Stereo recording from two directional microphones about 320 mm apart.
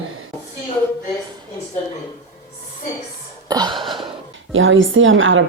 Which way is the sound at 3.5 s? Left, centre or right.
Centre.